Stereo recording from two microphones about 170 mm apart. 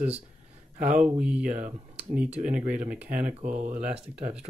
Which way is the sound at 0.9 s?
5° right (ahead or behind).